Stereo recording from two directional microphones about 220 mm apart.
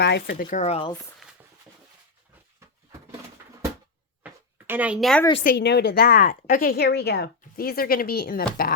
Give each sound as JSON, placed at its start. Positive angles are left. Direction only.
{"t": 0.0, "sound": "speech", "side_deg": 45}
{"t": 4.2, "sound": "a sound", "side_deg": -10}
{"t": 5.4, "sound": "speech", "side_deg": 40}